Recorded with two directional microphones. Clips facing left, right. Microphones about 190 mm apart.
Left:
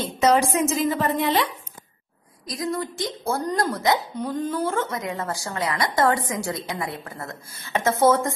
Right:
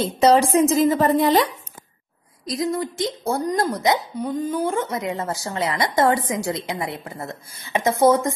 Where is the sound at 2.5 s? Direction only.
25° right (ahead or behind).